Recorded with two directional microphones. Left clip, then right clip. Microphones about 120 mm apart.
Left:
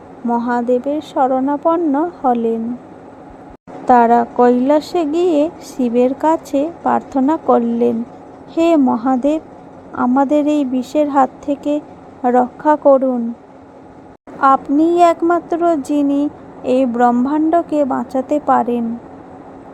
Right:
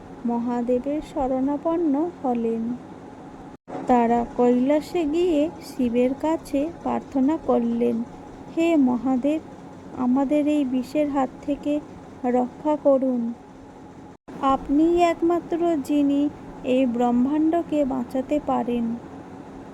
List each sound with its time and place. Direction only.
0.3 s a woman's voice: 45° left (ahead or behind)
3.8 s a woman's voice: 45° left (ahead or behind)
14.4 s a woman's voice: 50° left (ahead or behind)